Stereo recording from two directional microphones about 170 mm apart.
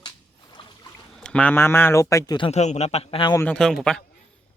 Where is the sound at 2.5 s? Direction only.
40° left (ahead or behind).